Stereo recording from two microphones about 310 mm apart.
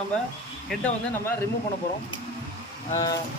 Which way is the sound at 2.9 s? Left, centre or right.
Centre.